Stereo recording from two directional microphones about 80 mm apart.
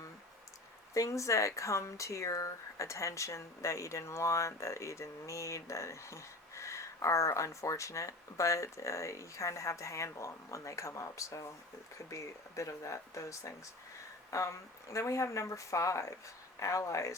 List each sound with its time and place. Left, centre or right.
0.9 s speech: left